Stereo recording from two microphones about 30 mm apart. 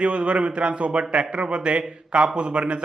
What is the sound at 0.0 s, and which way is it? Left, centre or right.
Speech, right.